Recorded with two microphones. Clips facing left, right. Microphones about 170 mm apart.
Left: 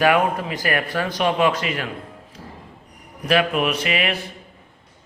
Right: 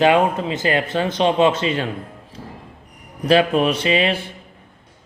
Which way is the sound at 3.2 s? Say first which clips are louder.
Right 4 dB; 30° right (ahead or behind).